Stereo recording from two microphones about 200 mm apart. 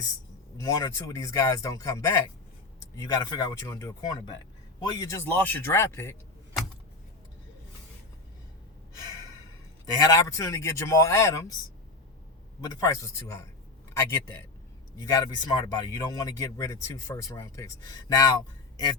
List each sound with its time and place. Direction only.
0.5 s speech: 15° left (ahead or behind)
9.8 s speech: 15° left (ahead or behind)
12.6 s speech: 15° left (ahead or behind)